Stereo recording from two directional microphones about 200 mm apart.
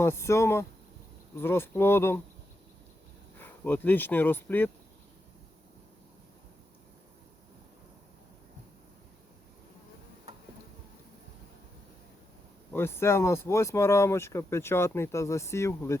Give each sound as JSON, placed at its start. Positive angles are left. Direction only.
{"t": 0.0, "sound": "speech", "side_deg": 15}
{"t": 3.3, "sound": "speech", "side_deg": 10}
{"t": 12.7, "sound": "speech", "side_deg": 10}